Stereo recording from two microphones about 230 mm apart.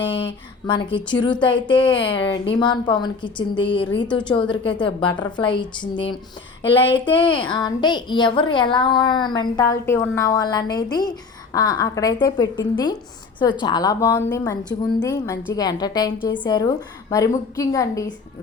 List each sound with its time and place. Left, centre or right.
0.0 s a woman's voice: left